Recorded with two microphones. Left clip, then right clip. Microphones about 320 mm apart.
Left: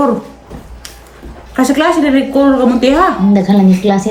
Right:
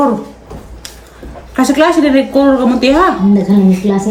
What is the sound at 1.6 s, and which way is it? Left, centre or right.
A woman's voice, centre.